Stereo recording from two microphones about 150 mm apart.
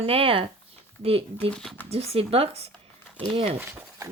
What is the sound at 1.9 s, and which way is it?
Speech, 40° right (ahead or behind).